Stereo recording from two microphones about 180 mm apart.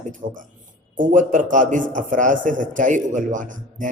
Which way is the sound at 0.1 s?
45° right (ahead or behind).